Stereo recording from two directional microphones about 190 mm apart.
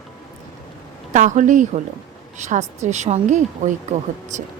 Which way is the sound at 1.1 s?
40° right (ahead or behind).